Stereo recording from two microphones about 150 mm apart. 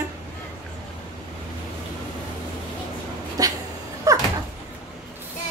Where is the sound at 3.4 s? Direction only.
25° right (ahead or behind).